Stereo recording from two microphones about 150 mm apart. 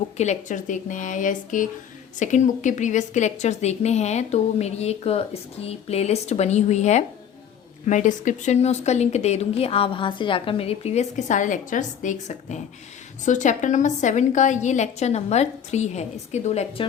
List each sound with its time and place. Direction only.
0.2 s a woman's voice: 55° left (ahead or behind)